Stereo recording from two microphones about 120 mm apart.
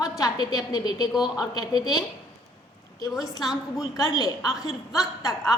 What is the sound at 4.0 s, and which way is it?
A woman's voice, 30° left (ahead or behind).